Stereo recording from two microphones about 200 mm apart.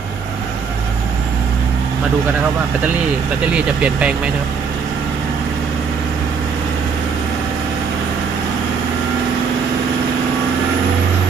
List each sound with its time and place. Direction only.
3.5 s speech: 5° right (ahead or behind)